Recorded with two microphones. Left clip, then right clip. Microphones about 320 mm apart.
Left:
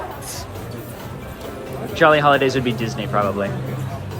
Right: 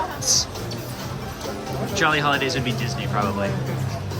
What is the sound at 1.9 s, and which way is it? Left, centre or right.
Speech, centre.